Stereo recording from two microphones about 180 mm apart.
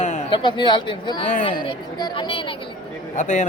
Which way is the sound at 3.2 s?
40° left (ahead or behind).